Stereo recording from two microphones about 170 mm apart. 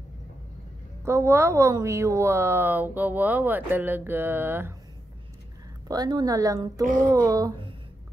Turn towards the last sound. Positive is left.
turn(degrees=-20)  # may be behind; listen again after turning